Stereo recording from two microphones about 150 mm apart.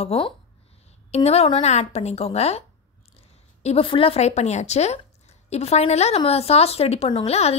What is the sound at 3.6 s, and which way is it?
A woman's voice, 40° left (ahead or behind).